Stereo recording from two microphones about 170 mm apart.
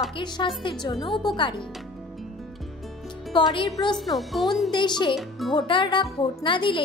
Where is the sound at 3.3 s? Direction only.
25° left (ahead or behind).